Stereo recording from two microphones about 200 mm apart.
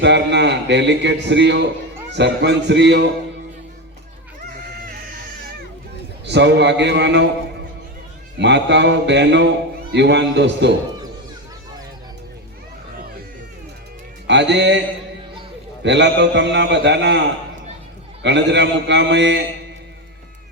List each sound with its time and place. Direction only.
0.0 s a man's voice: 60° right (ahead or behind)
6.2 s a man's voice: 60° right (ahead or behind)
8.4 s a man's voice: 60° right (ahead or behind)
14.3 s speech: 60° right (ahead or behind)
15.8 s a man's voice: 60° right (ahead or behind)